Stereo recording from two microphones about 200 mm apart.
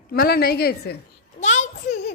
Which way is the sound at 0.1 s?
50° left (ahead or behind).